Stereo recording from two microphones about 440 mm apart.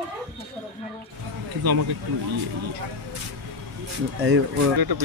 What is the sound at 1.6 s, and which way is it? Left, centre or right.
Speech, right.